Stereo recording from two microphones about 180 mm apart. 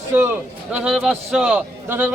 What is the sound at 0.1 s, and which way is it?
Speech, 10° right (ahead or behind).